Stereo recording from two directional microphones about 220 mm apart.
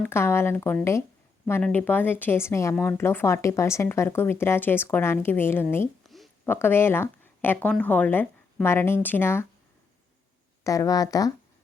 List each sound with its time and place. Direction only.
0.0 s speech: 10° left (ahead or behind)
10.6 s speech: 15° left (ahead or behind)